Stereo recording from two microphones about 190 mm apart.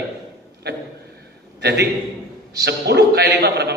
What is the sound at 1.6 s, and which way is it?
A man's voice, 60° right (ahead or behind).